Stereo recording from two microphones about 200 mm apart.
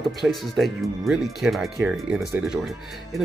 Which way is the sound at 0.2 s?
Centre (ahead or behind).